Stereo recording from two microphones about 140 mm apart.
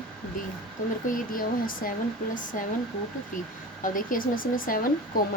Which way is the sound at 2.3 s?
75° left (ahead or behind).